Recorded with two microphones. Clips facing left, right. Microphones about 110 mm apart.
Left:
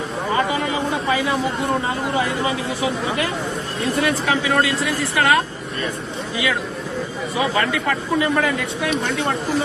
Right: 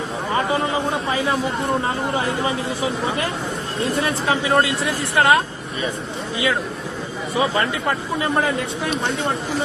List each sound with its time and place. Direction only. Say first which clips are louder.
4.0 s speech: left 3 dB; 30° right (ahead or behind)
9.0 s speech: even; 70° left (ahead or behind)